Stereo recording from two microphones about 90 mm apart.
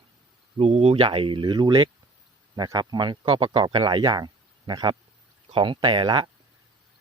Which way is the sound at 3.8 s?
50° right (ahead or behind).